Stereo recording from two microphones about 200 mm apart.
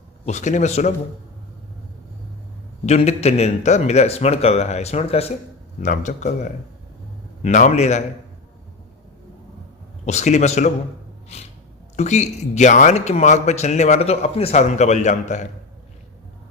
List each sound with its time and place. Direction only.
0.3 s speech: 35° left (ahead or behind)
2.8 s speech: 35° left (ahead or behind)
10.1 s speech: 35° left (ahead or behind)
11.9 s speech: 35° left (ahead or behind)